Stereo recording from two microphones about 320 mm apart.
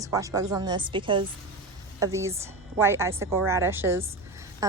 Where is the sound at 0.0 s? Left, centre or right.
Centre.